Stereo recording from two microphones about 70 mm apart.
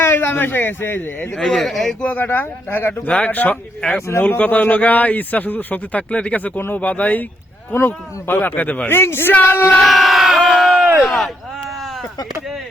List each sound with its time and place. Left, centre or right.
0.0 s speech: left
1.4 s speech: centre
2.0 s a man's voice: left
7.7 s a man's voice: left
8.9 s speech: left
9.8 s crowd: centre
11.0 s speech: centre